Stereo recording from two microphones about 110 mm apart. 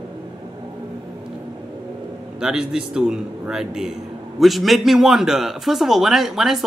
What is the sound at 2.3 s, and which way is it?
A man's voice, 5° right (ahead or behind).